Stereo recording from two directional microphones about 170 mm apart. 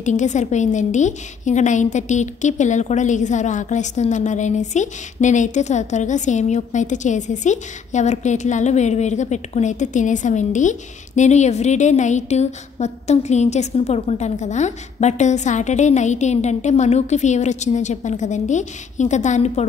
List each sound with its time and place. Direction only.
0.0 s a woman's voice: 45° left (ahead or behind)